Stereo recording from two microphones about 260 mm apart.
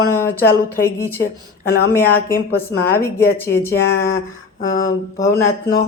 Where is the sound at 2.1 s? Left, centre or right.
Left.